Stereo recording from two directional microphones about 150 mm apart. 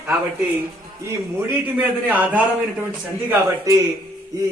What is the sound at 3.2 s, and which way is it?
Speech, 20° right (ahead or behind).